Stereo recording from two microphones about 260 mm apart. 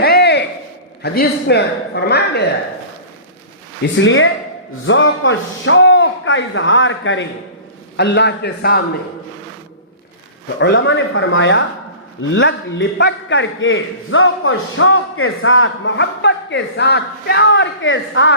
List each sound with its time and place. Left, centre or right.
0.0 s a sound: left
1.0 s a man's voice: left
3.9 s a man's voice: left
10.6 s speech: left